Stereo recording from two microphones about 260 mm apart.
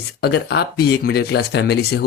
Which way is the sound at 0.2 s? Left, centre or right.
Left.